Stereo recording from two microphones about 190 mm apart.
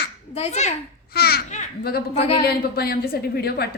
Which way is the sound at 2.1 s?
30° left (ahead or behind).